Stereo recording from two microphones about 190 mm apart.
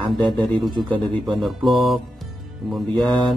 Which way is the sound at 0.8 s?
25° right (ahead or behind).